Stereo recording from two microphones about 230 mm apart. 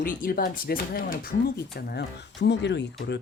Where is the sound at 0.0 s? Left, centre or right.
Left.